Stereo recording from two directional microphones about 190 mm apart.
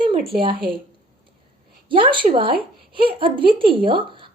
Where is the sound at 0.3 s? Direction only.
25° right (ahead or behind).